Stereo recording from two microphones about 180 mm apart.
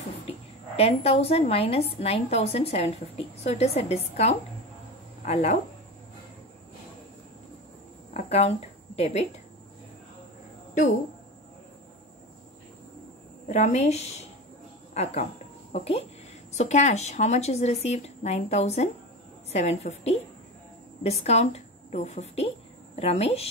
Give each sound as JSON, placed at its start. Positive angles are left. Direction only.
{"t": 0.7, "sound": "a woman's voice", "side_deg": 35}
{"t": 8.1, "sound": "speech", "side_deg": 35}
{"t": 13.5, "sound": "a woman's voice", "side_deg": 40}
{"t": 15.7, "sound": "a woman's voice", "side_deg": 35}